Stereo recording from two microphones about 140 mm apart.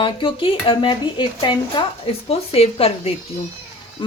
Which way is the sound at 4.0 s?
35° left (ahead or behind).